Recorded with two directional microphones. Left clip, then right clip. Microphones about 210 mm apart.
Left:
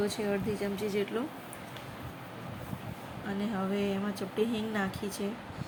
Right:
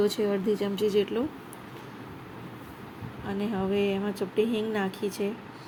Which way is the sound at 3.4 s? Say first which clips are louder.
Right 6 dB; 10° right (ahead or behind).